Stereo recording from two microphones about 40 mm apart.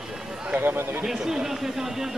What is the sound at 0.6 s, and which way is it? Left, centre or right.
Speech, right.